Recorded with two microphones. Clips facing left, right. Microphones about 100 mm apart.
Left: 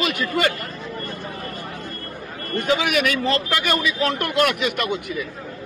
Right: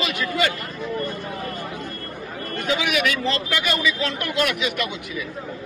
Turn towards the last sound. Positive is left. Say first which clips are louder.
# left 2 dB
turn(degrees=50)  # may be behind; listen again after turning